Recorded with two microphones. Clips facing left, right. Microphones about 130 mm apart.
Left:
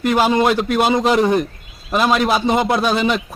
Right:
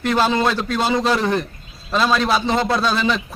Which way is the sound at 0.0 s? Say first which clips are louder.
Left 3 dB; 10° left (ahead or behind).